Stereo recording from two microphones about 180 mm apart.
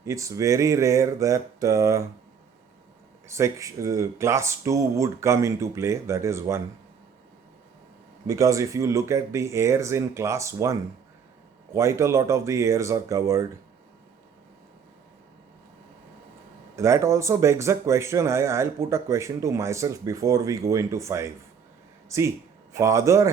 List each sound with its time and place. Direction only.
0.0 s speech: 15° right (ahead or behind)
3.2 s speech: 15° right (ahead or behind)
8.3 s speech: 20° right (ahead or behind)
16.7 s speech: 15° right (ahead or behind)